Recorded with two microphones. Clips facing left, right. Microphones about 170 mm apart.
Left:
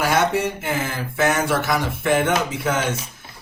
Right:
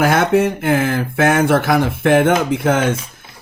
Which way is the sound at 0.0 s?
55° right (ahead or behind).